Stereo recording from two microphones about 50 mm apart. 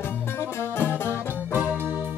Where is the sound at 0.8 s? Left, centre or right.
Left.